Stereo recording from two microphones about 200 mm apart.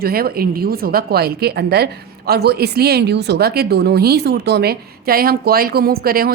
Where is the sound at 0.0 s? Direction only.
50° right (ahead or behind).